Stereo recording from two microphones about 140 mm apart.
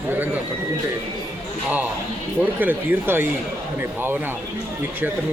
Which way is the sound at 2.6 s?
15° right (ahead or behind).